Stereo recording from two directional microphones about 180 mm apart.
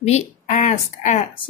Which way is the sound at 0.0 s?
40° left (ahead or behind).